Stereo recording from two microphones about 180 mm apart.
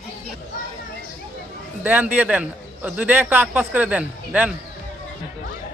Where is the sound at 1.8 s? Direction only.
10° right (ahead or behind).